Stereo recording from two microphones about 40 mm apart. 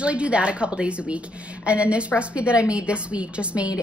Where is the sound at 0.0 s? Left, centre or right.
Right.